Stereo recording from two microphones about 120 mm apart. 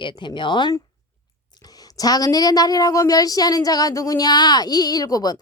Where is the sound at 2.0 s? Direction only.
30° left (ahead or behind).